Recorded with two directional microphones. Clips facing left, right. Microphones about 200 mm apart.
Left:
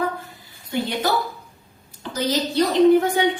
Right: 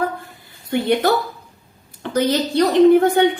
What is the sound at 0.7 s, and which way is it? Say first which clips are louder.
A woman's voice: right 6 dB; 60° right (ahead or behind).